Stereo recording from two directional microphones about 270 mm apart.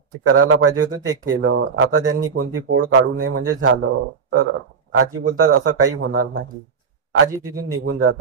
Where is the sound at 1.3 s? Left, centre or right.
Right.